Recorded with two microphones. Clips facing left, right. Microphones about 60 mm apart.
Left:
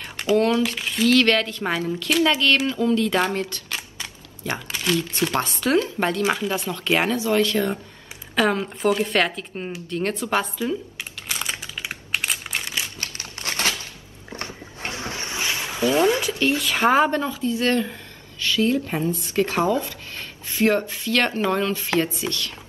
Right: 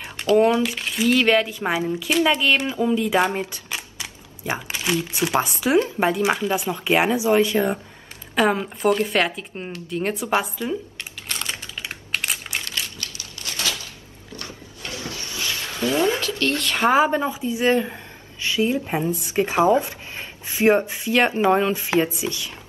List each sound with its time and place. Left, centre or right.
0.7 s a woman's voice: centre
11.2 s typing: centre
11.6 s crumpling: centre
13.0 s a sound: left
15.8 s a woman's voice: centre
17.1 s a woman's voice: centre